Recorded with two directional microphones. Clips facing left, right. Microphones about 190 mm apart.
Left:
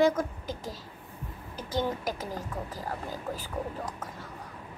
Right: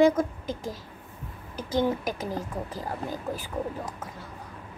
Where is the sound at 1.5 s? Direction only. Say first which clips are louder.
Right 5 dB; 15° right (ahead or behind).